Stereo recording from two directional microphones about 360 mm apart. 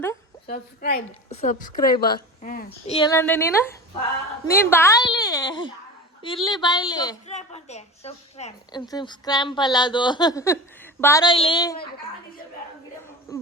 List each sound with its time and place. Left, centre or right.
0.4 s a woman's voice: left